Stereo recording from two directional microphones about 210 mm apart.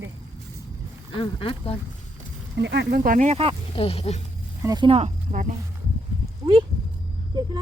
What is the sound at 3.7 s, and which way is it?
Speech, 25° left (ahead or behind).